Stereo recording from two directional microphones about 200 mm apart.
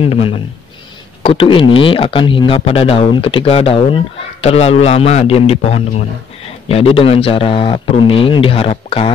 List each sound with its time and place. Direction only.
0.0 s speech: 30° left (ahead or behind)